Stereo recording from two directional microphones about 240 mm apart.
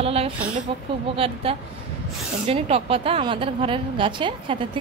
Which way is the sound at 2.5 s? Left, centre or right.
Right.